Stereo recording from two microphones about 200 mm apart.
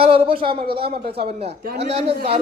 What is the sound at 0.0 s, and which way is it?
Speech, 25° right (ahead or behind).